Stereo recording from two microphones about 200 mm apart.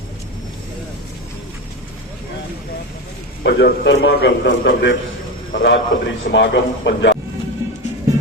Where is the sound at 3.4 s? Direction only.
60° left (ahead or behind).